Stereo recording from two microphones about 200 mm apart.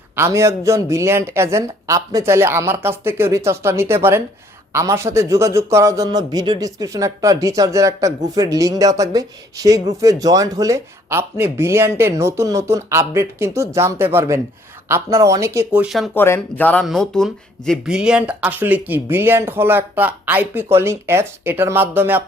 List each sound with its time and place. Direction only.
0.2 s speech: 15° right (ahead or behind)
16.1 s speech: 10° left (ahead or behind); by 22.2 s 10° right (ahead or behind)